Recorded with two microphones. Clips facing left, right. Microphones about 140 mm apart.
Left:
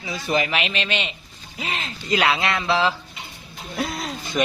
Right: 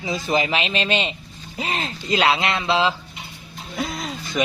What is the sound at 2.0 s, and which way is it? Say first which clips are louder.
Speech: right 1 dB; 25° right (ahead or behind).